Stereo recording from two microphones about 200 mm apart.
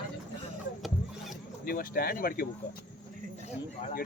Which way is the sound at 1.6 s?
45° left (ahead or behind).